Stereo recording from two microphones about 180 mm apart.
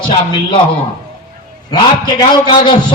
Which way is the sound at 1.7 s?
25° left (ahead or behind).